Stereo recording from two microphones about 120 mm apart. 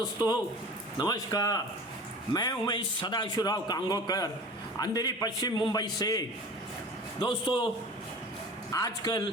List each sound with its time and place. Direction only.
0.0 s a man's voice: 35° left (ahead or behind)
7.3 s a man's voice: 45° left (ahead or behind)
8.7 s a man's voice: 30° left (ahead or behind)